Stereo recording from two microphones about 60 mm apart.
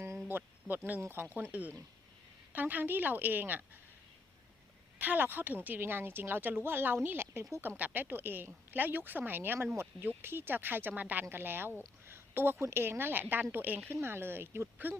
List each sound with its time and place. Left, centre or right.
0.3 s a sound: right
1.0 s speech: right
1.5 s speech: right
4.9 s speech: right
13.9 s speech: right